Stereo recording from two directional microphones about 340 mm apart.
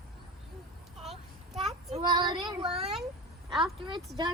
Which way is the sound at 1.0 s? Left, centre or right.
Centre.